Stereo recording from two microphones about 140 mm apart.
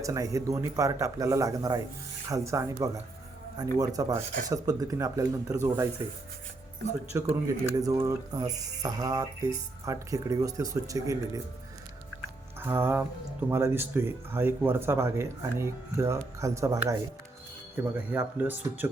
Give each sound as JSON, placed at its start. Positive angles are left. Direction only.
{"t": 0.0, "sound": "speech", "side_deg": -25}
{"t": 7.1, "sound": "speech", "side_deg": -20}
{"t": 12.5, "sound": "speech", "side_deg": -15}
{"t": 17.9, "sound": "speech", "side_deg": -10}